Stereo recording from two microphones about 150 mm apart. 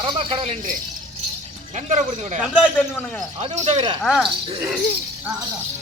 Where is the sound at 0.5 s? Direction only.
60° right (ahead or behind).